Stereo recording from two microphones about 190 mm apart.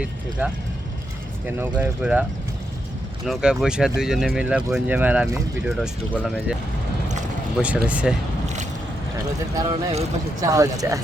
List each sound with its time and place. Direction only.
0.0 s speech: 5° right (ahead or behind)
3.2 s speech: 5° right (ahead or behind)
9.1 s speech: 20° right (ahead or behind)